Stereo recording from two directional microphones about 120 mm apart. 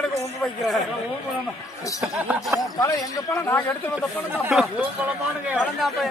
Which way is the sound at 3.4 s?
15° left (ahead or behind).